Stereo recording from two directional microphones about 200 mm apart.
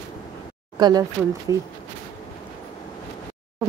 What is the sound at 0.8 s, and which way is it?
Speech, 20° right (ahead or behind).